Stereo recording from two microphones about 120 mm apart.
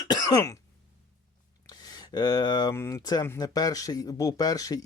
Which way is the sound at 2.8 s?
25° left (ahead or behind).